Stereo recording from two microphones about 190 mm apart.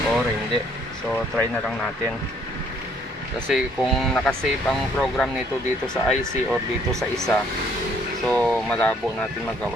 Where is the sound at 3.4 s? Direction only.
Centre (ahead or behind).